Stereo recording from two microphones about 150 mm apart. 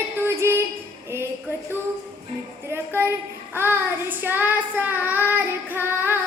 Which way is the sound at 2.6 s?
15° right (ahead or behind).